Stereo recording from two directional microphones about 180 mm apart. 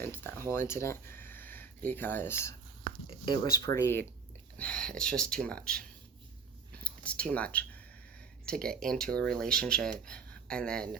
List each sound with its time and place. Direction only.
0.0 s speech: 10° left (ahead or behind)
6.8 s speech: 5° left (ahead or behind)